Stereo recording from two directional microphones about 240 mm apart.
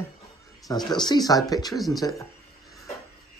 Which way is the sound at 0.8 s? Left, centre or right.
Centre.